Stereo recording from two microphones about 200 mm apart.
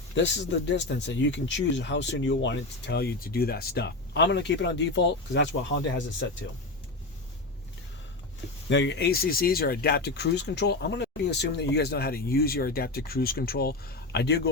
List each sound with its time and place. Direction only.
0.2 s speech: 65° left (ahead or behind)
8.7 s speech: 65° left (ahead or behind)